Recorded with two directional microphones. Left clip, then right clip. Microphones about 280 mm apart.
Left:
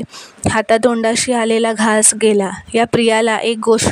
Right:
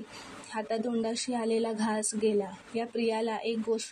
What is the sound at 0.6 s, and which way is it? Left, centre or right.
Speech, left.